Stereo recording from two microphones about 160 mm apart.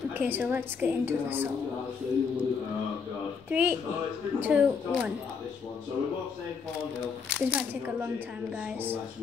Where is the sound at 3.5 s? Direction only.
10° right (ahead or behind).